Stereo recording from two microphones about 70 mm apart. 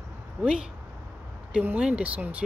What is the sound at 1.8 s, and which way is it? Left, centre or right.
Speech, centre.